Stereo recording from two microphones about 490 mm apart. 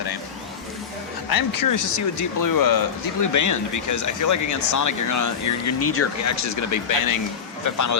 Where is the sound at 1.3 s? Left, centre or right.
Left.